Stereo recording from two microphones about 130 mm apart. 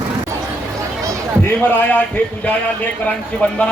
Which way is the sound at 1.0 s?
25° right (ahead or behind).